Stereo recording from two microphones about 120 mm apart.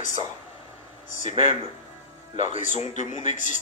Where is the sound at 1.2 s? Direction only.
80° left.